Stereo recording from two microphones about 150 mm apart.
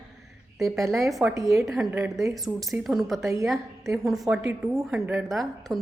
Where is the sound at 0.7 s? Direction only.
20° right (ahead or behind).